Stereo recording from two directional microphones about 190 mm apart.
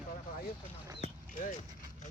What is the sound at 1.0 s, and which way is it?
Clip-clop, 40° left (ahead or behind).